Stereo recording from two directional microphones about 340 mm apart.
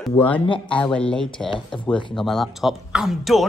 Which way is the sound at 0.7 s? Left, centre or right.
Centre.